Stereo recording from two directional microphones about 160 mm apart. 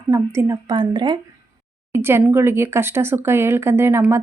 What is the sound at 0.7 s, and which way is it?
Speech, 25° right (ahead or behind).